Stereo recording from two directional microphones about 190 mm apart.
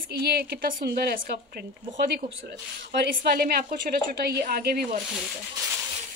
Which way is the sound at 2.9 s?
60° right (ahead or behind).